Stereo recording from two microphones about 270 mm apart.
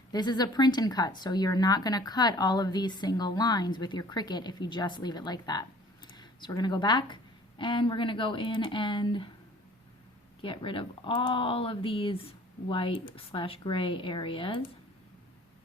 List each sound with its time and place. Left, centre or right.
0.1 s a woman's voice: centre
10.4 s speech: centre